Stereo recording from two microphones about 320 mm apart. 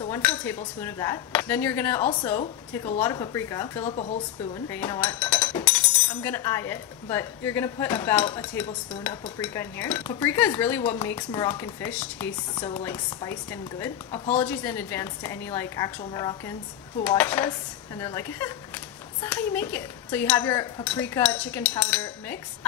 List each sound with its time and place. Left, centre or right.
0.0 s speech: centre
3.8 s speech: centre
4.6 s speech: centre